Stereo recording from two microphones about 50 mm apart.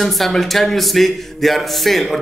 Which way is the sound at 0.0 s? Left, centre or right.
Centre.